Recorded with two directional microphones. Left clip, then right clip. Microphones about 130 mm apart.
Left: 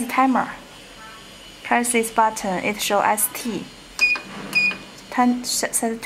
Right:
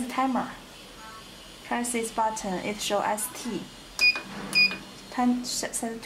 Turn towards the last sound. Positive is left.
turn(degrees=30)  # may be behind; listen again after turning